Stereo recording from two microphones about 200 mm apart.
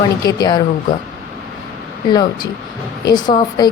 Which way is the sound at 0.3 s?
20° left (ahead or behind).